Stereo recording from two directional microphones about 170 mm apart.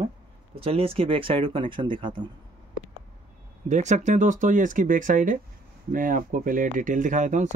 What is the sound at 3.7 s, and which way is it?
Speech, 45° right (ahead or behind).